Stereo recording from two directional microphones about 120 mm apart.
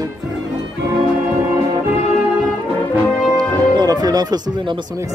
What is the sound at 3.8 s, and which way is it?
Speech, 35° right (ahead or behind).